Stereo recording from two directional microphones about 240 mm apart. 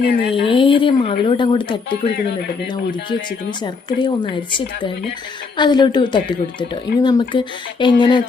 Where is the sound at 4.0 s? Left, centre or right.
Centre.